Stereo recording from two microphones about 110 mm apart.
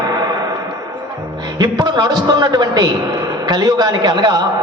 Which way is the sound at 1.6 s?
35° right (ahead or behind).